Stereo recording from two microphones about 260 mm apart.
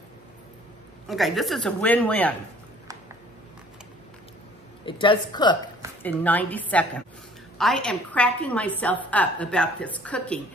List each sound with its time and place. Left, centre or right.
1.0 s a woman's voice: centre
4.8 s a woman's voice: centre
6.0 s a woman's voice: centre